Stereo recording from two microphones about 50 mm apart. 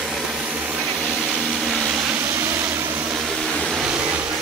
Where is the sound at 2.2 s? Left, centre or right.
Right.